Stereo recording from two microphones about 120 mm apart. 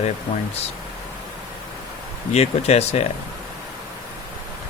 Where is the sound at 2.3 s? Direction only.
65° left (ahead or behind).